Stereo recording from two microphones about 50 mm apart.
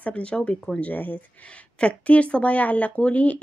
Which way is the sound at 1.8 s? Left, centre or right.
Left.